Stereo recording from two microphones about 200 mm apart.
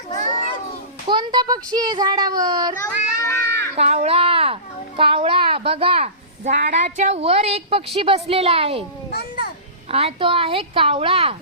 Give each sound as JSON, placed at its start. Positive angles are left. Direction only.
{"t": 1.0, "sound": "a woman's voice", "side_deg": -25}
{"t": 3.2, "sound": "a sound", "side_deg": 10}
{"t": 3.8, "sound": "a woman's voice", "side_deg": -30}
{"t": 9.1, "sound": "children playing", "side_deg": 50}
{"t": 9.9, "sound": "a woman's voice", "side_deg": -30}